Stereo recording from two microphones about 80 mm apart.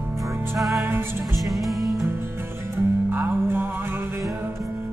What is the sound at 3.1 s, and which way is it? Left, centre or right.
Music, right.